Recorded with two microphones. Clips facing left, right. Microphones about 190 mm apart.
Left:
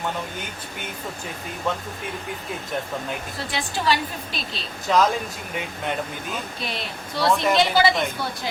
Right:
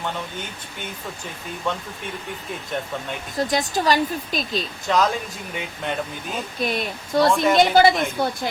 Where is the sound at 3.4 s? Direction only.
40° right (ahead or behind).